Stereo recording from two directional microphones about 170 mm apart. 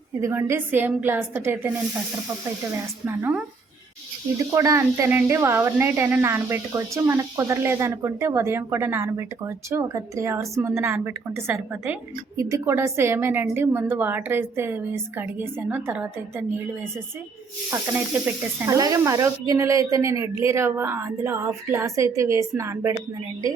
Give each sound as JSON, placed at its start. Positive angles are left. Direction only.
{"t": 0.2, "sound": "speech", "side_deg": -15}
{"t": 3.1, "sound": "speech", "side_deg": -15}
{"t": 17.7, "sound": "speech", "side_deg": -10}